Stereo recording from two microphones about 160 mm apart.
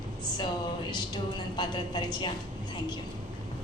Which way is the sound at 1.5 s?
30° left (ahead or behind).